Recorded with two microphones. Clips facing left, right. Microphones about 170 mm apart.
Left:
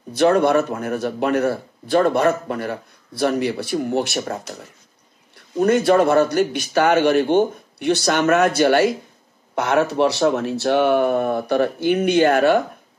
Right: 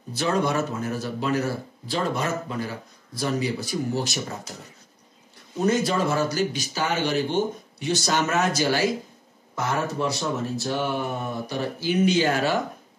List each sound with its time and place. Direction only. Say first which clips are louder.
0.1 s speech: left 9 dB; 60° left (ahead or behind)
5.6 s speech: left 7 dB; 60° left (ahead or behind)